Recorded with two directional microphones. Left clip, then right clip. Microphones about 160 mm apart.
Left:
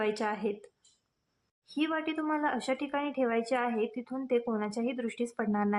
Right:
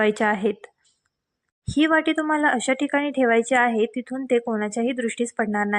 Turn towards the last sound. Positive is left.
turn(degrees=-35)  # may be behind; listen again after turning